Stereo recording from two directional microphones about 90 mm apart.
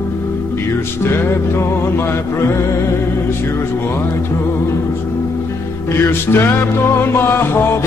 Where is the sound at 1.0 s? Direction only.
30° left (ahead or behind).